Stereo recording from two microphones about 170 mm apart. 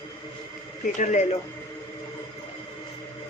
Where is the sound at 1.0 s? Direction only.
45° left (ahead or behind).